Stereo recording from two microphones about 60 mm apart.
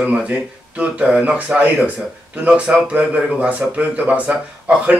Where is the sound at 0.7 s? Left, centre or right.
Centre.